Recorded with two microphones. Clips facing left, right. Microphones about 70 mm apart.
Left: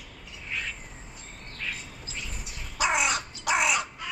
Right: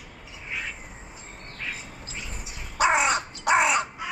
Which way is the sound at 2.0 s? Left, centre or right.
Centre.